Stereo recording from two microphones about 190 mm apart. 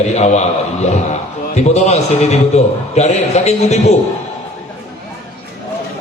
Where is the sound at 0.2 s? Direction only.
35° left (ahead or behind).